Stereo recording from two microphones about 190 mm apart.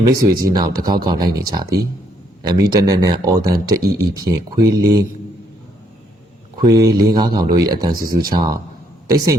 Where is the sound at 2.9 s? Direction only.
20° right (ahead or behind).